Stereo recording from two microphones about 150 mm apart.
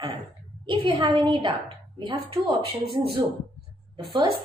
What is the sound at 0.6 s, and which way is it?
A woman's voice, 35° right (ahead or behind).